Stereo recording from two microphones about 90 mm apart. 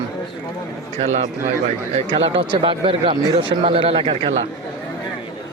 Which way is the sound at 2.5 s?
70° right (ahead or behind).